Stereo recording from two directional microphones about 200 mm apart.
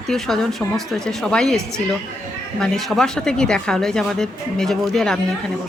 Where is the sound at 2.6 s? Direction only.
Centre (ahead or behind).